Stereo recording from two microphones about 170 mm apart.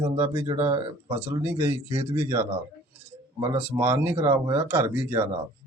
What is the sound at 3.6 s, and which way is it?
Speech, 15° right (ahead or behind).